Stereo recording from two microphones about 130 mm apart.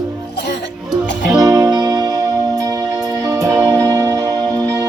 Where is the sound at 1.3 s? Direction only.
30° right (ahead or behind).